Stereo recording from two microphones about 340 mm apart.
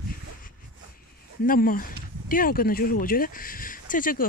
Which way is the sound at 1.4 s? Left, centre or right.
Left.